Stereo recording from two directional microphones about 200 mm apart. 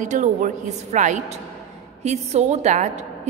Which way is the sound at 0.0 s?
40° right (ahead or behind).